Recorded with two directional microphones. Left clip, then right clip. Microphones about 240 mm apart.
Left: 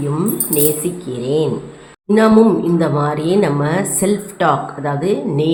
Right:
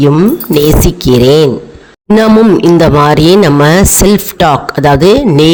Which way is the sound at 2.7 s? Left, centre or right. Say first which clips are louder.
Right 11 dB; right.